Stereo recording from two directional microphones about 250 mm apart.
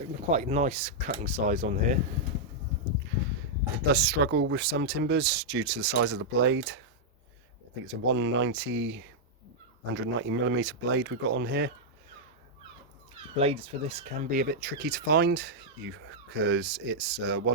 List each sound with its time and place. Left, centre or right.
0.0 s speech: right
3.8 s speech: right
8.0 s speech: right
13.4 s speech: right